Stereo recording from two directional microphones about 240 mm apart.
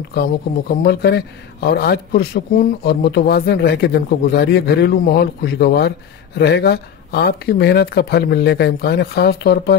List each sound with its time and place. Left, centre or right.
0.1 s a man's voice: left